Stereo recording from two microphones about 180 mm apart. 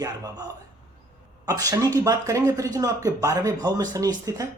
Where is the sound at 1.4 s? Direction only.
20° right (ahead or behind).